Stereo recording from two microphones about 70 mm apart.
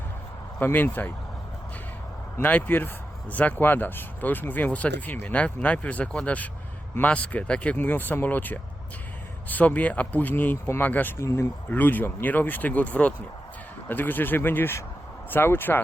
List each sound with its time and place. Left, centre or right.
0.6 s speech: left
2.4 s speech: left
11.2 s speech: left
11.7 s speech: left